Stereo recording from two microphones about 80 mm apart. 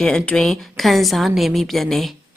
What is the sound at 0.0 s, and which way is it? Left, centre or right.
A woman's voice, centre.